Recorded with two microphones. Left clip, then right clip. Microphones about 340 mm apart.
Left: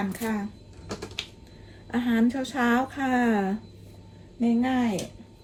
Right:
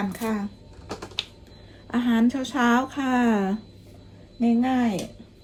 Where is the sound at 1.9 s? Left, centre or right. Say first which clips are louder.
Right 2 dB; centre.